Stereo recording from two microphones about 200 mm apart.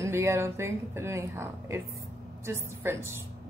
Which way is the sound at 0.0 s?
15° right (ahead or behind).